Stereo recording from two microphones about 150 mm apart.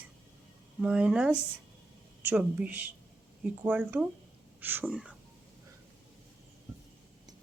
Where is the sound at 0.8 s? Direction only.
5° right (ahead or behind).